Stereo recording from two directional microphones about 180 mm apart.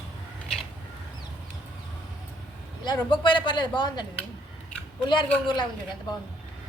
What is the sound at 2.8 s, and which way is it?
A man's voice, 25° left (ahead or behind).